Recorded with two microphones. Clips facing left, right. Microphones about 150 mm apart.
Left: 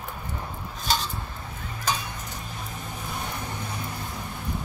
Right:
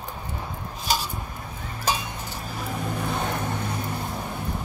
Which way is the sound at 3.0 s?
70° right (ahead or behind).